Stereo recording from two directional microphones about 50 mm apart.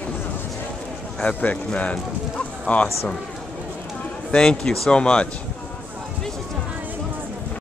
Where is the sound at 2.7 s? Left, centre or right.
Left.